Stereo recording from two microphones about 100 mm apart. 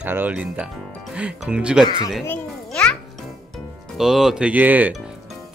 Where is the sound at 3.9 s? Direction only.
5° right (ahead or behind).